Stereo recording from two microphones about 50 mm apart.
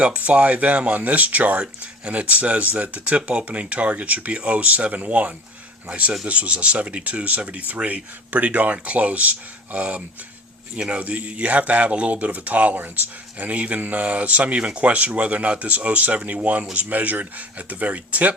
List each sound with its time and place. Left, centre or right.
0.0 s speech: right
13.4 s speech: right